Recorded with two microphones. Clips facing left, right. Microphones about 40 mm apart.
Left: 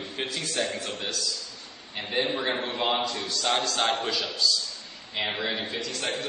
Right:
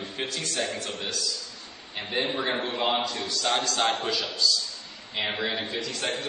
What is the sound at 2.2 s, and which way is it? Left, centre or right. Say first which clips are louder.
Speech: left 1 dB; right.